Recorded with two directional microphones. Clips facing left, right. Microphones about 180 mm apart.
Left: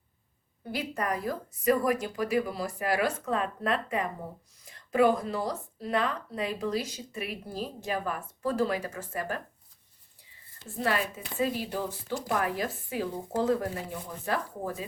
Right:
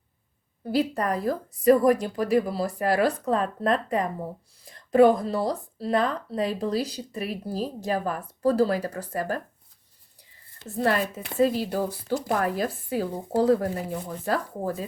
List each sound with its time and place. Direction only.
0.7 s speech: 35° right (ahead or behind)
10.6 s speech: 70° right (ahead or behind)
11.3 s speech: 40° right (ahead or behind)